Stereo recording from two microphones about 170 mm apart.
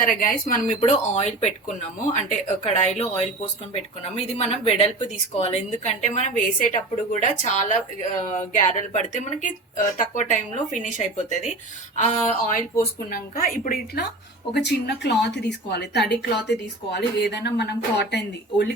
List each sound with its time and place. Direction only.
0.0 s a woman's voice: 55° left (ahead or behind)
0.8 s speech: 40° left (ahead or behind)
4.4 s a woman's voice: 40° left (ahead or behind); by 14.1 s 60° left (ahead or behind)
14.5 s speech: 85° left
15.7 s a woman's voice: 75° left (ahead or behind)